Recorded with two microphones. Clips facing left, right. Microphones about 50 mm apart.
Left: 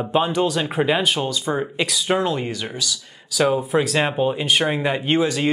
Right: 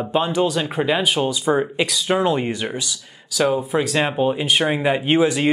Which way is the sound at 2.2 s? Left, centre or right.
Centre.